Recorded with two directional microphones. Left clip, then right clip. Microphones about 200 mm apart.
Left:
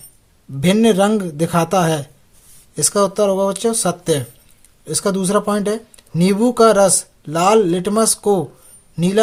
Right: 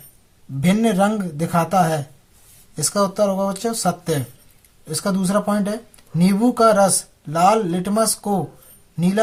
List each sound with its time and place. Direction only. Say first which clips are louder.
0.6 s speech: left 4 dB; 45° left (ahead or behind)